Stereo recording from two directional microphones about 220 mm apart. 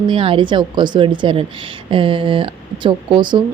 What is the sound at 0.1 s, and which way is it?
Speech, 25° right (ahead or behind).